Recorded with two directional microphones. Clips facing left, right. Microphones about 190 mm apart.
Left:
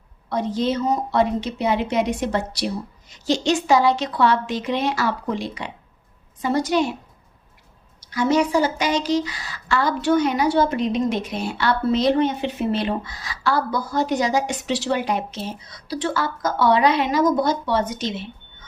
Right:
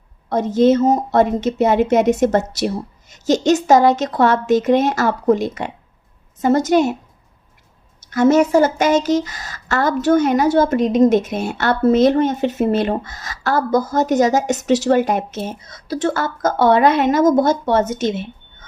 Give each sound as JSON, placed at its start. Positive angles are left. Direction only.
{"t": 0.3, "sound": "speech", "side_deg": -45}
{"t": 8.1, "sound": "speech", "side_deg": -50}